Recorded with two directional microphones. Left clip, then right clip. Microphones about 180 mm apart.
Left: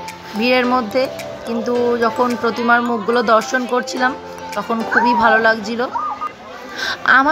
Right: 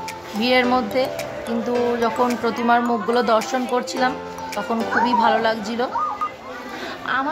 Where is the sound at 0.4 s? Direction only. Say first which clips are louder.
Left 3 dB; 15° left (ahead or behind).